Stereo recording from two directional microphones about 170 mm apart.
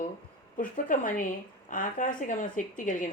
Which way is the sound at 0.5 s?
55° left (ahead or behind).